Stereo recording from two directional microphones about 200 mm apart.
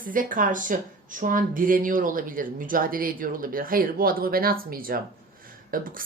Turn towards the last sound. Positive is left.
turn(degrees=-45)  # may be behind; listen again after turning